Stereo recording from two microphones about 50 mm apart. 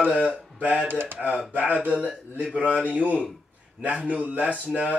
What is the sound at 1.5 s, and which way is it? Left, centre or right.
Speech, right.